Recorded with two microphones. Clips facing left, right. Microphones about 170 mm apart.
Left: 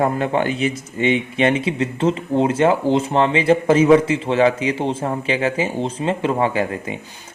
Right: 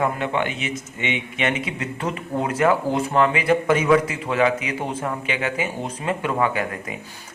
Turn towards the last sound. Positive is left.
turn(degrees=30)  # may be behind; listen again after turning